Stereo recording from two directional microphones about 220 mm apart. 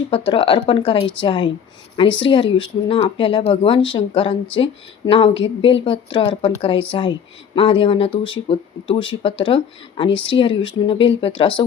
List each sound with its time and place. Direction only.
0.1 s speech: 25° left (ahead or behind)